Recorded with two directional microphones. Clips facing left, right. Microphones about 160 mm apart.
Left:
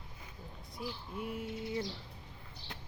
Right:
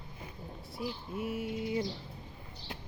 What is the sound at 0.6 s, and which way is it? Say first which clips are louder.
Speech: right 4 dB; 5° right (ahead or behind).